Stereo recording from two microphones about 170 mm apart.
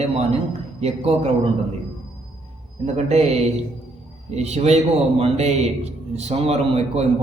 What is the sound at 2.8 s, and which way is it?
A man's voice, 40° right (ahead or behind).